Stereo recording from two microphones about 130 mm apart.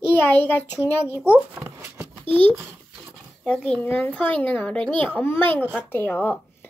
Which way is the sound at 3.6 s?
10° left (ahead or behind).